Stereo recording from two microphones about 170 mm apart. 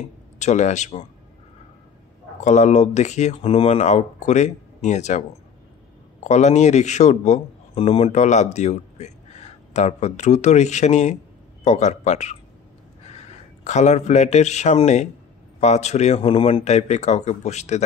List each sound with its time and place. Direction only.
0.4 s speech: 45° left (ahead or behind)
2.4 s speech: 45° left (ahead or behind)
6.2 s a man's voice: 45° left (ahead or behind)